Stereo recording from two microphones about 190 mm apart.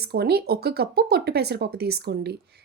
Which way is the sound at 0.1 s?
55° right (ahead or behind).